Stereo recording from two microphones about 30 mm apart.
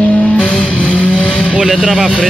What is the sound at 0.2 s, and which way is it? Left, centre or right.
Vehicle, left.